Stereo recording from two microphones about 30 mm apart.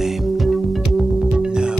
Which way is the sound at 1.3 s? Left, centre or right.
Right.